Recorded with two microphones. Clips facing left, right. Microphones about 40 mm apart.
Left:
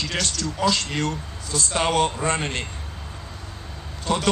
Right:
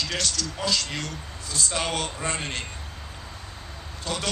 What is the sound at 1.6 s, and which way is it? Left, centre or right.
Speech, left.